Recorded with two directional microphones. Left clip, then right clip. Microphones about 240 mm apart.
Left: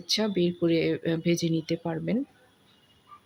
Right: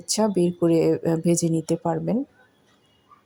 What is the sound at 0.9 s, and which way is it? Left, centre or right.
Speech, centre.